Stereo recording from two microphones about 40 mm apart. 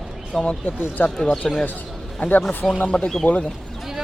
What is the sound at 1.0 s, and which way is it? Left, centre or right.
Speech, left.